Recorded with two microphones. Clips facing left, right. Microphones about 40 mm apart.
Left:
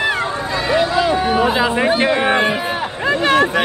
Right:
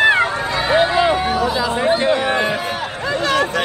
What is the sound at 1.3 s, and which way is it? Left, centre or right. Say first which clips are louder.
Chatter: left 3 dB; left.